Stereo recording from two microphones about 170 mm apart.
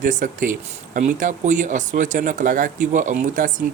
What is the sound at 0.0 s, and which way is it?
Speech, 50° right (ahead or behind).